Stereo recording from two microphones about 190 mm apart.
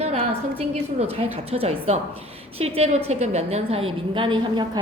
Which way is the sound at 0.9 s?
30° right (ahead or behind).